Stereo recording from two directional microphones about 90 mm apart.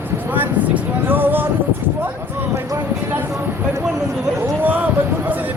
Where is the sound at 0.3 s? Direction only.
20° right (ahead or behind).